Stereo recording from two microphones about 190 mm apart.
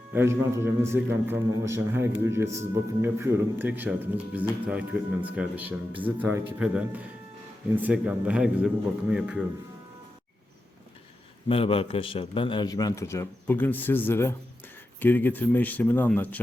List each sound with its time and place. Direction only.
0.1 s a man's voice: 15° right (ahead or behind)
11.4 s a man's voice: 30° left (ahead or behind); by 16.4 s 10° left (ahead or behind)